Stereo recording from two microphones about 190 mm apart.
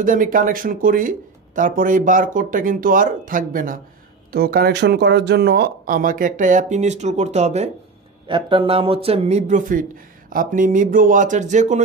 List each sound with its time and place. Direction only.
0.0 s speech: 45° right (ahead or behind)